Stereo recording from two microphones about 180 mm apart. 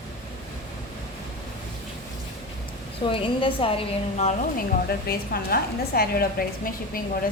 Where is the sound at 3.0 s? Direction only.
30° left (ahead or behind).